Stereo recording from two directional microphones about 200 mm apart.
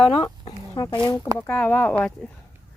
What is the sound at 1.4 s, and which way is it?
Speech, 10° left (ahead or behind).